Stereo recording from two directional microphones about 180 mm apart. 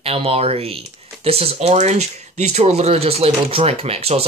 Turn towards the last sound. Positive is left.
turn(degrees=-35)  # may be behind; listen again after turning